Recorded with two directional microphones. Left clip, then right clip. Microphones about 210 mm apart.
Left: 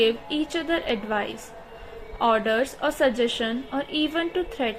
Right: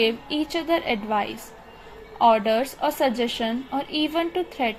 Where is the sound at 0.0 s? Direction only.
20° right (ahead or behind).